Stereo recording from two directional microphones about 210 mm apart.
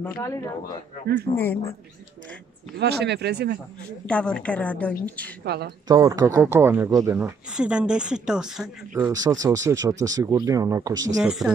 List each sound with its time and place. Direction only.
1.3 s speech: 10° left (ahead or behind)
2.8 s speech: 50° right (ahead or behind)
4.1 s a woman's voice: 5° left (ahead or behind)
5.4 s speech: 50° right (ahead or behind)
5.9 s speech: 15° right (ahead or behind)
11.2 s a woman's voice: 5° right (ahead or behind)